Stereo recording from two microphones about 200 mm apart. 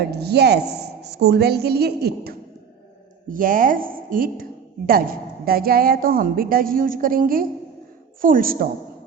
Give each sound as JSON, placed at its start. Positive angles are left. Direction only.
{"t": 0.0, "sound": "a woman's voice", "side_deg": -55}
{"t": 5.5, "sound": "a woman's voice", "side_deg": -50}